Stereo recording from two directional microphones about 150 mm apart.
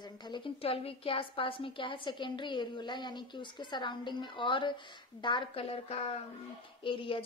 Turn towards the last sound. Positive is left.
turn(degrees=35)  # may be behind; listen again after turning